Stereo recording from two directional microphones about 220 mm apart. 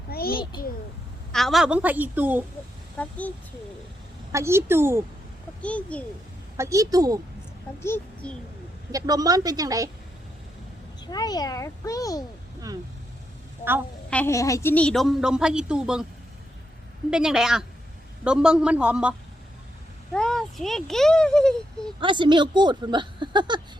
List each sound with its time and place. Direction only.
0.1 s a sound: 45° left (ahead or behind)
1.3 s a woman's voice: centre (ahead or behind)
3.0 s speech: 5° left (ahead or behind)
4.3 s a woman's voice: 15° right (ahead or behind)
5.6 s a woman's voice: 5° left (ahead or behind)
6.6 s a woman's voice: 15° right (ahead or behind)
7.8 s speech: 10° left (ahead or behind)
8.9 s a woman's voice: 15° right (ahead or behind)
11.0 s speech: 15° left (ahead or behind)
14.1 s a woman's voice: 10° left (ahead or behind)
17.1 s a woman's voice: 5° right (ahead or behind)
20.1 s a woman's voice: 5° left (ahead or behind)
22.0 s speech: 20° right (ahead or behind)